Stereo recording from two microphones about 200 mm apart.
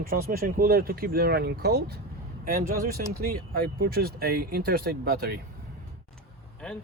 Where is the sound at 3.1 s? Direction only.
45° right (ahead or behind).